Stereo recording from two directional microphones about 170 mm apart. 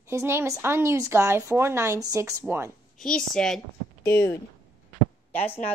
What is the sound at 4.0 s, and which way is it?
Speech, 15° left (ahead or behind).